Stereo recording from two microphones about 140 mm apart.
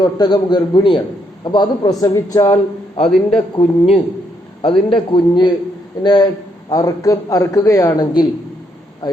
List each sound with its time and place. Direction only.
0.0 s a man's voice: 30° left (ahead or behind)
3.5 s a man's voice: 45° left (ahead or behind)